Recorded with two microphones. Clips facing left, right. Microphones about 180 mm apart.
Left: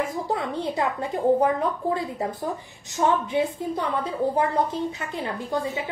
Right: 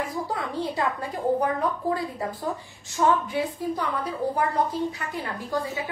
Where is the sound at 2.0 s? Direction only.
20° left (ahead or behind).